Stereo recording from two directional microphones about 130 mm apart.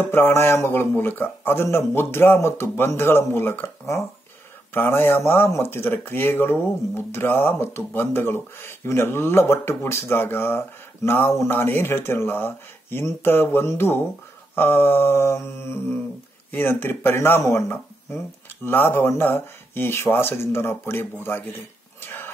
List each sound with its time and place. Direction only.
0.0 s speech: 15° left (ahead or behind)
22.0 s dog: 15° left (ahead or behind)